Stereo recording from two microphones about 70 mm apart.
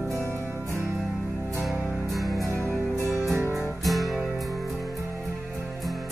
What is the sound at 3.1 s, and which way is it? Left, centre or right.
Music, centre.